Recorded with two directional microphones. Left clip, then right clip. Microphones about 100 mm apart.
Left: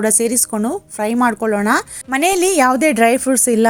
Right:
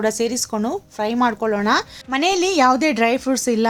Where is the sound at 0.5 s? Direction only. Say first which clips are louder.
Left 2 dB; 35° left (ahead or behind).